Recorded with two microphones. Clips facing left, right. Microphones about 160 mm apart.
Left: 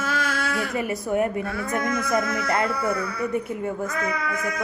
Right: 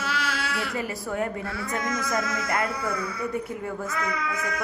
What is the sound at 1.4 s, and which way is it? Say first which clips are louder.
A man's voice: left 4 dB; 50° left (ahead or behind).